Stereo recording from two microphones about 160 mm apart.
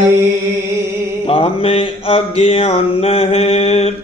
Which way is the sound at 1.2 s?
35° left (ahead or behind).